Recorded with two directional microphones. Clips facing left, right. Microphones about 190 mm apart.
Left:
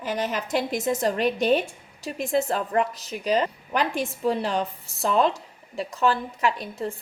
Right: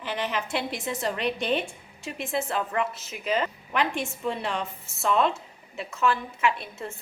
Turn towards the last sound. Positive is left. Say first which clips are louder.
# left 2 dB
turn(degrees=35)  # may be behind; listen again after turning